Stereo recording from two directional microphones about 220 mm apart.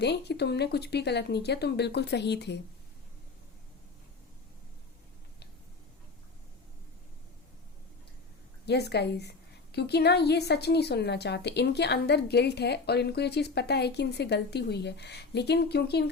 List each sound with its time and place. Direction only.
0.0 s a woman's voice: 50° left (ahead or behind)
8.6 s a woman's voice: 50° left (ahead or behind)